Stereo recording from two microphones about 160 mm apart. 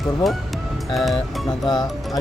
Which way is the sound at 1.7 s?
25° left (ahead or behind).